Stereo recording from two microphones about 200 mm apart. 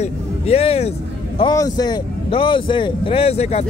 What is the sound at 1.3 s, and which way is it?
A man's voice, 20° left (ahead or behind).